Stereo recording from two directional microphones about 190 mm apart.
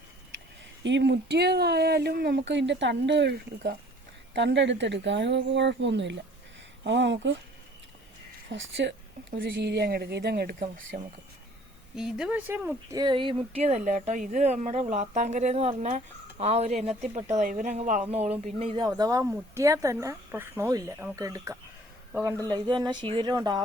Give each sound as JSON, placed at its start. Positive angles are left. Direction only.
{"t": 0.9, "sound": "speech", "side_deg": -70}
{"t": 8.5, "sound": "speech", "side_deg": -75}
{"t": 9.6, "sound": "speech", "side_deg": -60}
{"t": 11.9, "sound": "speech", "side_deg": -5}
{"t": 18.9, "sound": "speech", "side_deg": -20}